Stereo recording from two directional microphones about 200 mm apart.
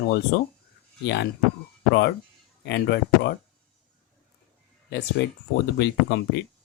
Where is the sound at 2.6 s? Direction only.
55° left (ahead or behind).